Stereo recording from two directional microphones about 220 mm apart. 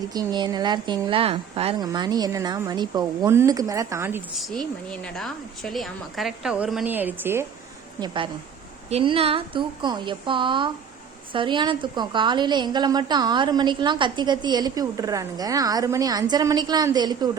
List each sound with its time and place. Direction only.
0.1 s speech: 15° right (ahead or behind)
4.4 s a woman's voice: centre (ahead or behind)
8.0 s a woman's voice: 20° right (ahead or behind)